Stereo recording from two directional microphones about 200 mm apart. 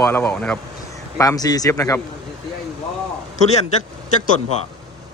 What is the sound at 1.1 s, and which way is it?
Speech, 15° left (ahead or behind).